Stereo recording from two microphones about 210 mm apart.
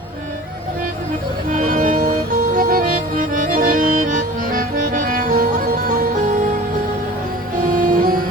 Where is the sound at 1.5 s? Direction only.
40° right (ahead or behind).